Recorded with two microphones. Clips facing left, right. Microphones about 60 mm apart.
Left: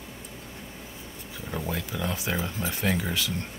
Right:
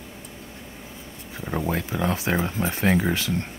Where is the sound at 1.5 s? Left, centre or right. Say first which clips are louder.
Right 6 dB; right.